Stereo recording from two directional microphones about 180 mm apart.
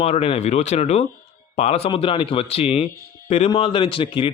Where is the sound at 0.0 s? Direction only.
35° left (ahead or behind).